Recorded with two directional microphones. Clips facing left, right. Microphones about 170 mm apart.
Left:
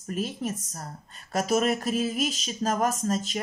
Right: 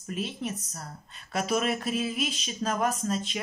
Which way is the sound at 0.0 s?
45° left (ahead or behind).